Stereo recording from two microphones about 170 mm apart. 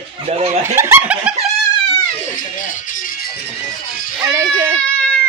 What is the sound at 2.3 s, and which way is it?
Music, 50° left (ahead or behind).